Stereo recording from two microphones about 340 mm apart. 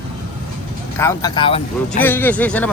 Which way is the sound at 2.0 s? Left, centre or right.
Centre.